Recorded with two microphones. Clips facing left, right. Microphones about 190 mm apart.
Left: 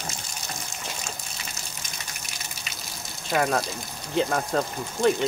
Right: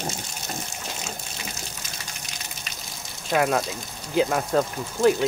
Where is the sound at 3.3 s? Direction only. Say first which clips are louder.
Right 2 dB; centre (ahead or behind).